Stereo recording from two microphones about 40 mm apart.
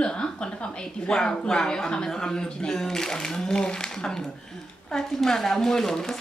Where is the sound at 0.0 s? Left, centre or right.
Left.